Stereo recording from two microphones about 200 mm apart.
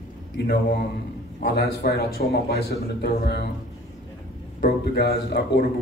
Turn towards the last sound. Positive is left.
turn(degrees=55)  # may be behind; listen again after turning